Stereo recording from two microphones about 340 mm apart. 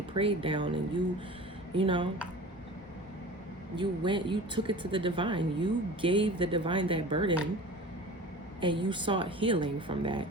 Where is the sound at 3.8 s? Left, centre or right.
Centre.